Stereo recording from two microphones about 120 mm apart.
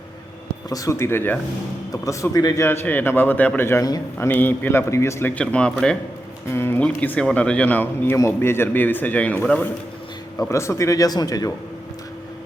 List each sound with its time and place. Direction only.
0.7 s speech: 25° left (ahead or behind)
2.6 s a man's voice: 15° left (ahead or behind)
3.8 s a man's voice: 35° left (ahead or behind)
4.3 s a man's voice: 15° left (ahead or behind)
5.3 s a man's voice: 10° left (ahead or behind)
6.5 s a man's voice: 20° left (ahead or behind)
10.3 s speech: 25° left (ahead or behind)